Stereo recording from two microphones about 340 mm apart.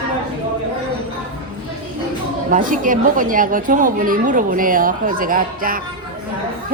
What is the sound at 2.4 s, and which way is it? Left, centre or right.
A woman's voice, right.